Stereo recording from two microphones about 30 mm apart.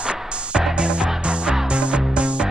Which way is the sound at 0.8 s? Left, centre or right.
Right.